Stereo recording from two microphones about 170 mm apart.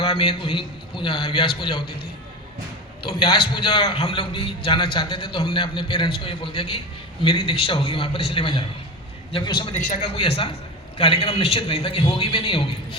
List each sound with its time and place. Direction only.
0.0 s a man's voice: 30° left (ahead or behind)
3.0 s a man's voice: 30° left (ahead or behind)